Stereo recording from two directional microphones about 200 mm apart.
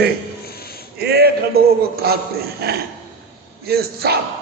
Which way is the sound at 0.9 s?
55° right (ahead or behind).